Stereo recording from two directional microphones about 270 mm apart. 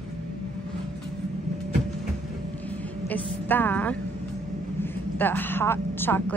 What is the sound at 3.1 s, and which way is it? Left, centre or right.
A woman's voice, centre.